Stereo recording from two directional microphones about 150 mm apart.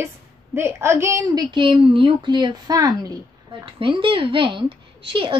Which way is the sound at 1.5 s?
35° right (ahead or behind).